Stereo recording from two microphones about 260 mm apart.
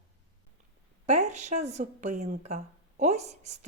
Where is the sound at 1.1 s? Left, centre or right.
Right.